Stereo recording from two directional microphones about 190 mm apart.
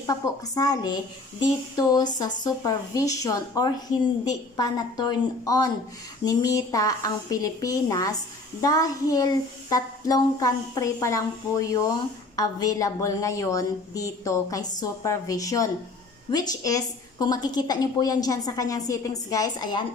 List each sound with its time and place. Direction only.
0.0 s a woman's voice: 20° left (ahead or behind)